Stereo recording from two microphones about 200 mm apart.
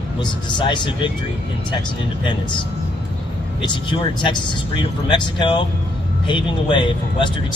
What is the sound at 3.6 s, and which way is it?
Speech, 25° left (ahead or behind).